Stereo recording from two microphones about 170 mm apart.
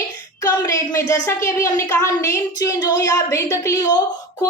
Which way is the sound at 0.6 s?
20° left (ahead or behind).